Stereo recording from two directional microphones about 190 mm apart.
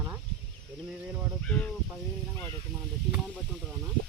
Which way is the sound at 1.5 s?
5° left (ahead or behind).